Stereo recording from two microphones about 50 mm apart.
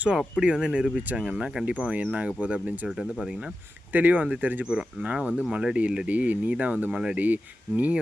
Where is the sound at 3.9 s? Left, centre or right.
Right.